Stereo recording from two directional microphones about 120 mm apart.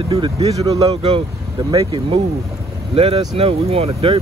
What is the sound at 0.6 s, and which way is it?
Speech, 30° right (ahead or behind).